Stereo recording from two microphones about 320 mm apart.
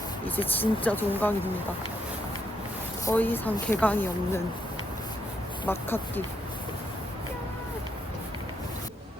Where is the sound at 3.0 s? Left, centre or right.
Centre.